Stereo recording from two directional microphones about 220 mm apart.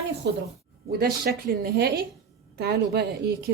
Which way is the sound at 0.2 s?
50° right (ahead or behind).